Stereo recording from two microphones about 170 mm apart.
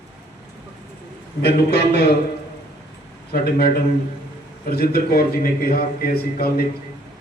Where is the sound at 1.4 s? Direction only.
70° left (ahead or behind).